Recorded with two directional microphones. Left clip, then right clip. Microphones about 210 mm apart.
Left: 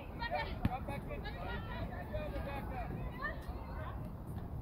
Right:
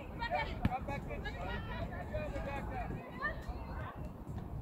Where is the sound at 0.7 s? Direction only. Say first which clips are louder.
Right 2 dB; centre (ahead or behind).